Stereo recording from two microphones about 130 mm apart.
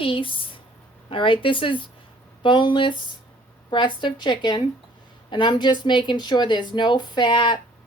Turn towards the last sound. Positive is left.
turn(degrees=40)  # may be behind; listen again after turning